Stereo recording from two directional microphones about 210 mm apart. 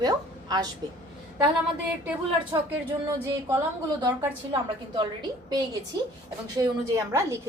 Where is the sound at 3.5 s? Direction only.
15° right (ahead or behind).